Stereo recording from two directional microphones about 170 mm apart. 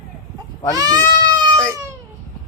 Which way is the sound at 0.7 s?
20° right (ahead or behind).